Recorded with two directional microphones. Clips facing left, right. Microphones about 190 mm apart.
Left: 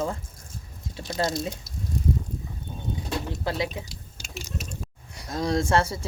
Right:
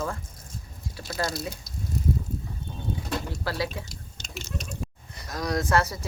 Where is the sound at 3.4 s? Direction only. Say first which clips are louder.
Left 3 dB; 20° left (ahead or behind).